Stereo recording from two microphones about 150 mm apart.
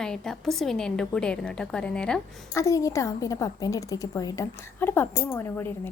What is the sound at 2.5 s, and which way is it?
A woman's voice, 20° left (ahead or behind).